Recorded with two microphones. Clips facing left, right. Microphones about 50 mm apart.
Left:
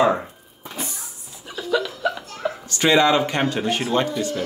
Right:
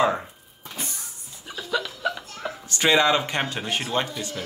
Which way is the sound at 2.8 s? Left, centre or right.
Centre.